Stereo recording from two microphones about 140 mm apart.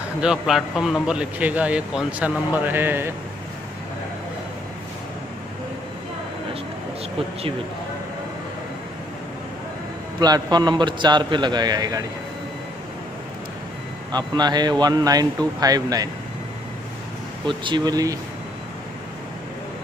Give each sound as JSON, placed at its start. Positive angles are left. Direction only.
{"t": 0.2, "sound": "a man's voice", "side_deg": -5}
{"t": 10.2, "sound": "a man's voice", "side_deg": -30}
{"t": 14.1, "sound": "speech", "side_deg": -30}
{"t": 17.5, "sound": "a man's voice", "side_deg": -35}